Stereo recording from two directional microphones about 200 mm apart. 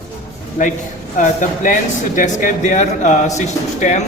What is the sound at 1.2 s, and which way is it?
Speech, 40° left (ahead or behind).